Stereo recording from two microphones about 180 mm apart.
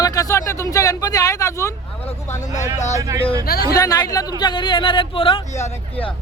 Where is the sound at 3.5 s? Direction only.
60° left (ahead or behind).